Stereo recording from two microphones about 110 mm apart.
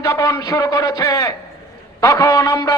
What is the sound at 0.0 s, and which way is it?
A man's voice, 30° left (ahead or behind).